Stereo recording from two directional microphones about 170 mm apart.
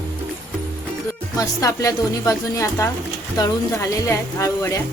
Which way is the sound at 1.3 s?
20° left (ahead or behind).